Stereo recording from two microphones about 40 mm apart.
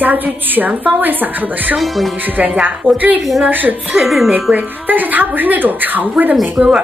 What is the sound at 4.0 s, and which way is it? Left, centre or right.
Speech, centre.